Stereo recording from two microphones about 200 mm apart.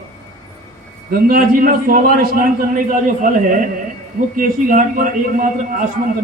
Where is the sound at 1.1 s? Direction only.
45° right (ahead or behind).